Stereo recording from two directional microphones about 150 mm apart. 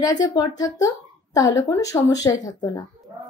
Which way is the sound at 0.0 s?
25° left (ahead or behind).